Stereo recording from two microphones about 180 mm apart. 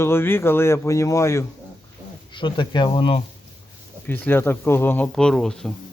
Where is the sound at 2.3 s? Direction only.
25° left (ahead or behind).